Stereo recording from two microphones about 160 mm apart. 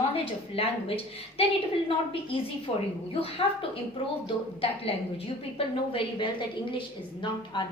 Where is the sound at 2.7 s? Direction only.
35° left (ahead or behind).